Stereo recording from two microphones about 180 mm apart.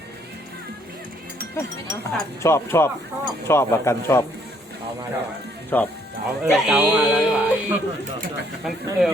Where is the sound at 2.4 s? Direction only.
15° left (ahead or behind).